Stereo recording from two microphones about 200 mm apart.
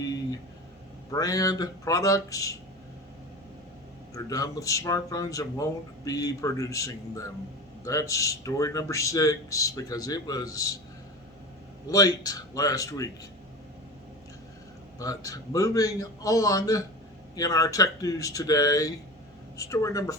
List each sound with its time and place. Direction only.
1.1 s speech: 15° left (ahead or behind)
4.1 s speech: 15° left (ahead or behind)
11.9 s speech: 15° left (ahead or behind)
14.9 s speech: 15° left (ahead or behind)